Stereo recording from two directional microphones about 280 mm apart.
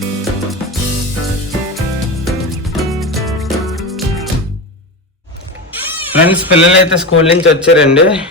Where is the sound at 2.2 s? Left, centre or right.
Centre.